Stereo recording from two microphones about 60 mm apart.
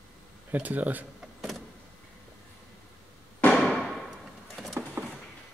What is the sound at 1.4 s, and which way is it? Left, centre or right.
Vehicle, centre.